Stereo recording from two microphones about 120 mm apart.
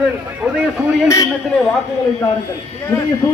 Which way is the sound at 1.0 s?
25° left (ahead or behind).